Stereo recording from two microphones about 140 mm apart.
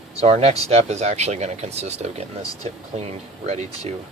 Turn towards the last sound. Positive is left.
turn(degrees=-50)  # may be behind; listen again after turning